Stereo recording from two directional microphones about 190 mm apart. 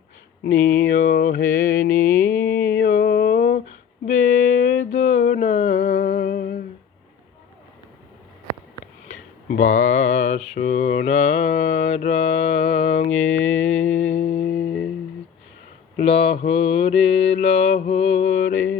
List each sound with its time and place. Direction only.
0.4 s a sound: 45° left (ahead or behind)
2.1 s mantra: 10° left (ahead or behind)
2.7 s a sound: 45° left (ahead or behind)
9.0 s a sound: 45° left (ahead or behind)
10.5 s mantra: 35° left (ahead or behind)
13.4 s mantra: 85° left
14.2 s music: 35° left (ahead or behind)
14.4 s music: 60° left (ahead or behind)
16.0 s mantra: 35° left (ahead or behind)